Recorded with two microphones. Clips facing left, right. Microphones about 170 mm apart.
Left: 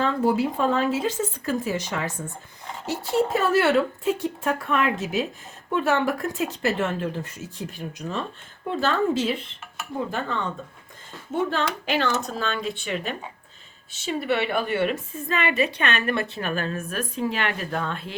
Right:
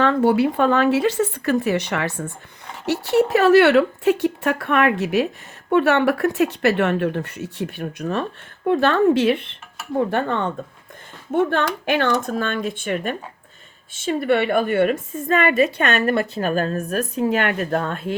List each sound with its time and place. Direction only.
0.0 s a woman's voice: 70° right (ahead or behind); by 18.2 s 45° right (ahead or behind)